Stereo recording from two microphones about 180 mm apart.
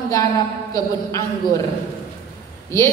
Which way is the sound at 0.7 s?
20° left (ahead or behind).